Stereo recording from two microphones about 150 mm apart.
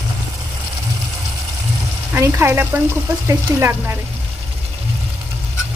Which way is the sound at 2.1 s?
15° right (ahead or behind).